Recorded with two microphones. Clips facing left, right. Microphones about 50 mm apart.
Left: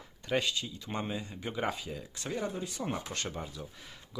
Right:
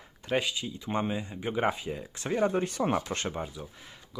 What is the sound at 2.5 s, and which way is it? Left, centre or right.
Speech, right.